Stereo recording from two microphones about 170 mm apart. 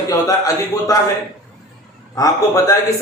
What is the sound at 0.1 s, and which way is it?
Speech, 20° left (ahead or behind).